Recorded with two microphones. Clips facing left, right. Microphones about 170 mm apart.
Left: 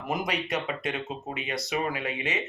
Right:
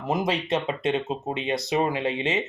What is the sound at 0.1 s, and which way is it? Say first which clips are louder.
Speech: right 5 dB; 25° right (ahead or behind).